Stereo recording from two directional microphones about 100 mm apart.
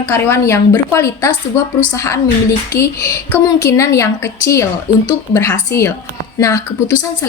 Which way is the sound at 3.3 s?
25° left (ahead or behind).